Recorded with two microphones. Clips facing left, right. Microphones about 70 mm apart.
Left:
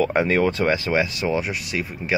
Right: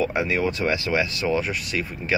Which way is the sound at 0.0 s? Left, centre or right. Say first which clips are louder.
Left 4 dB; left.